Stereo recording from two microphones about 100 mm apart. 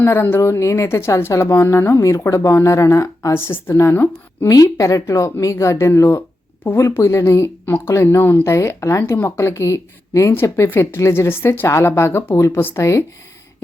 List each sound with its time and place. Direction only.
0.0 s speech: 25° left (ahead or behind)